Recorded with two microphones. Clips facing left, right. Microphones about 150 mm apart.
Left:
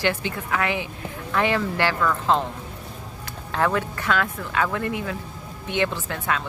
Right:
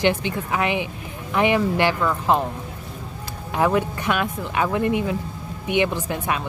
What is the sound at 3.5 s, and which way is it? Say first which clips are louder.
Speech: right 3 dB; 15° right (ahead or behind).